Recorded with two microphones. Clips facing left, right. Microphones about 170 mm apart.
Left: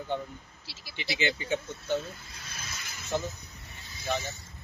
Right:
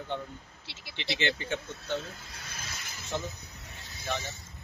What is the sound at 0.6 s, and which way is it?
Speech, 25° right (ahead or behind).